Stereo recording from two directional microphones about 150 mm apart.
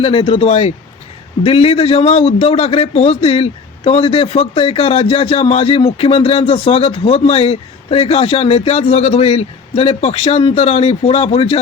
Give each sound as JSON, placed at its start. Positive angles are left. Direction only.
{"t": 0.0, "sound": "a man's voice", "side_deg": 40}